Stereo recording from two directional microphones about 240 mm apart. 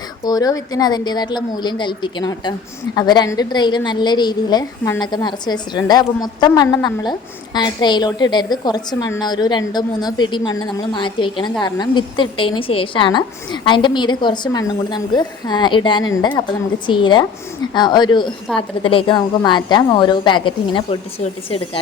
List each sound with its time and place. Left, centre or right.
0.3 s a woman's voice: centre